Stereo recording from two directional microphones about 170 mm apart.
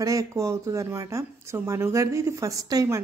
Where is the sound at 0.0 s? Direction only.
20° right (ahead or behind).